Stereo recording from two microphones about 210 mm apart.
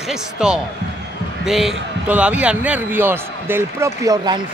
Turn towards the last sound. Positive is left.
turn(degrees=-15)  # may be behind; listen again after turning